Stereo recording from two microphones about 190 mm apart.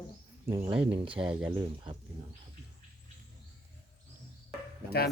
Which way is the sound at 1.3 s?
5° right (ahead or behind).